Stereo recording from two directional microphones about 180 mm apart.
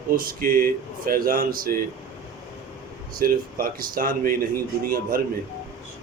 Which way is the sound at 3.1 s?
55° right (ahead or behind).